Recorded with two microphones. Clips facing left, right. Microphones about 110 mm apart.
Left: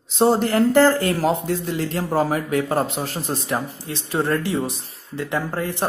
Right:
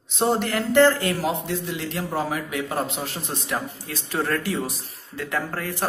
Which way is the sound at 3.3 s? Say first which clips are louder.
Left 4 dB; 30° left (ahead or behind).